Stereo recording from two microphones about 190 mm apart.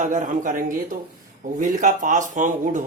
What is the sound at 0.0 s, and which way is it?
A man's voice, 40° right (ahead or behind).